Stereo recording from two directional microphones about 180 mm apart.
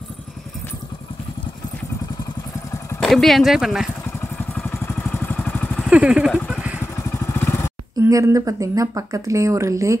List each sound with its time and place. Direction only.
3.0 s speech: centre (ahead or behind)
4.4 s vehicle: 10° left (ahead or behind)
5.9 s speech: 5° right (ahead or behind)
7.2 s vehicle: 15° left (ahead or behind)
8.0 s speech: 15° right (ahead or behind)